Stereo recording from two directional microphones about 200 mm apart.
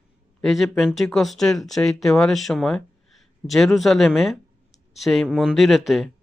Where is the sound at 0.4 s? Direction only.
Centre (ahead or behind).